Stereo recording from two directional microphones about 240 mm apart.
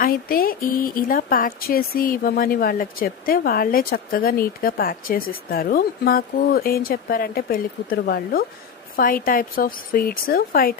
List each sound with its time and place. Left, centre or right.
0.0 s speech: left